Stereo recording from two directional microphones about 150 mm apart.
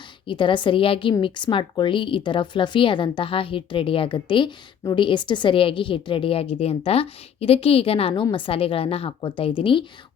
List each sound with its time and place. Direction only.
0.3 s a woman's voice: 35° left (ahead or behind)